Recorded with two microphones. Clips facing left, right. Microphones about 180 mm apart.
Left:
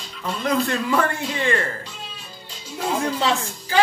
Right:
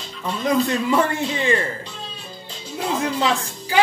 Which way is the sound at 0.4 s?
15° right (ahead or behind).